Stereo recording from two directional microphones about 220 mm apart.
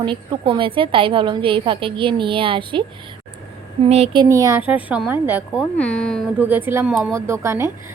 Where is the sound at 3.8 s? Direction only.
25° right (ahead or behind).